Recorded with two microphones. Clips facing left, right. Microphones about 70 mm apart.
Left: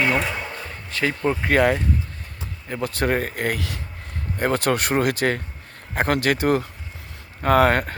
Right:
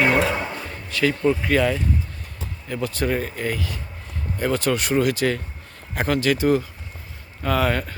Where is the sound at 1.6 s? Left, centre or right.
Left.